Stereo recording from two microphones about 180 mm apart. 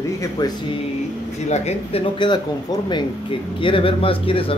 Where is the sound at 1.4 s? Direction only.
40° left (ahead or behind).